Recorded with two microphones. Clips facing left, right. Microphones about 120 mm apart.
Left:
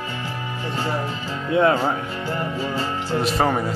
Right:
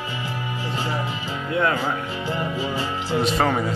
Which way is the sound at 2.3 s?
10° right (ahead or behind).